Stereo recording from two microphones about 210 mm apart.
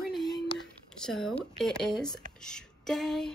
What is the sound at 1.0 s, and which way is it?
A woman's voice, centre (ahead or behind).